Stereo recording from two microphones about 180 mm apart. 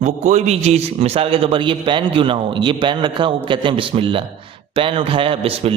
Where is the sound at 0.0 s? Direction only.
40° right (ahead or behind).